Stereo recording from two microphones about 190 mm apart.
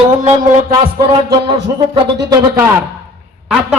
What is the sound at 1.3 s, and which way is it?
Music, 25° right (ahead or behind).